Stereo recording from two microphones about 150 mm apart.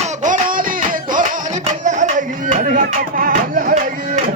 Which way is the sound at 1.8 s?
55° right (ahead or behind).